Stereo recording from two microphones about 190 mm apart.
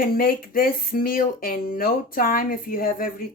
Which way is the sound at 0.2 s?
50° left (ahead or behind).